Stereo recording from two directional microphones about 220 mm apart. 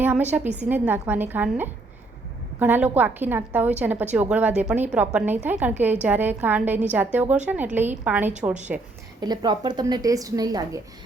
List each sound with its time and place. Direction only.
0.0 s a woman's voice: 5° right (ahead or behind)
9.2 s a woman's voice: 20° right (ahead or behind)